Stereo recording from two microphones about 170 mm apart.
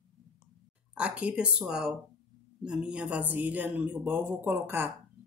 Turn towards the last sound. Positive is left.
turn(degrees=-10)  # may be behind; listen again after turning